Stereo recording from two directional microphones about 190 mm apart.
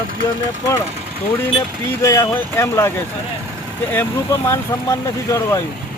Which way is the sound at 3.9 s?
10° left (ahead or behind).